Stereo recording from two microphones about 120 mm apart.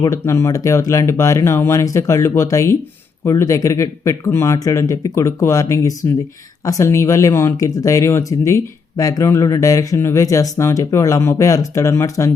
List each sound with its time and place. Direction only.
0.0 s speech: 25° left (ahead or behind)